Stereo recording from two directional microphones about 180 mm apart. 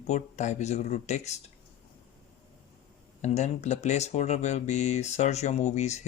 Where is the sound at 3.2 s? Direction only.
40° left (ahead or behind).